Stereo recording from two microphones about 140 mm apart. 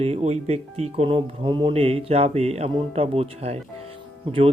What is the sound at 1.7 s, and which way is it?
Speech, 45° right (ahead or behind).